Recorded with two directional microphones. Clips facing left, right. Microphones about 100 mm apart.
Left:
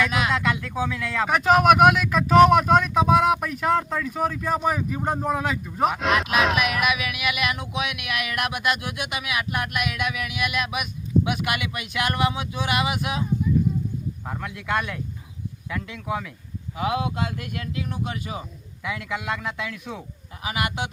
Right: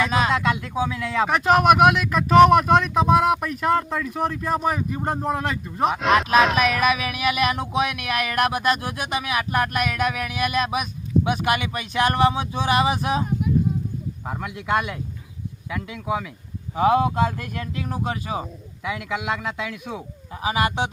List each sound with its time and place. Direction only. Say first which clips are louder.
0.0 s speech: right 2 dB; 35° right (ahead or behind)
0.3 s speech: right 2 dB; 15° right (ahead or behind)
1.3 s speech: even; centre (ahead or behind)
6.6 s speech: right 3 dB; 35° right (ahead or behind)
14.3 s speech: right 4 dB; 15° right (ahead or behind)
16.7 s speech: right 7 dB; 40° right (ahead or behind)
18.9 s speech: right 2 dB; 15° right (ahead or behind)
20.4 s speech: right 5 dB; 35° right (ahead or behind)